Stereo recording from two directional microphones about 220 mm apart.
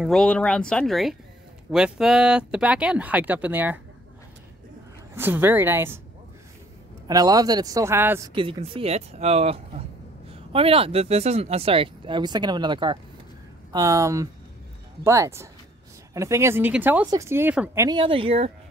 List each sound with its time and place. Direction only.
0.0 s speech: centre (ahead or behind)
5.1 s speech: 10° right (ahead or behind)
7.1 s speech: 15° right (ahead or behind)
8.4 s speech: 25° right (ahead or behind)